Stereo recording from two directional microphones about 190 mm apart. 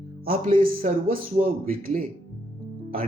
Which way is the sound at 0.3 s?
50° right (ahead or behind).